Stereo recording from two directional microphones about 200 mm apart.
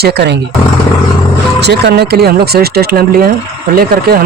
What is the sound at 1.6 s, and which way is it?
Speech, 55° right (ahead or behind).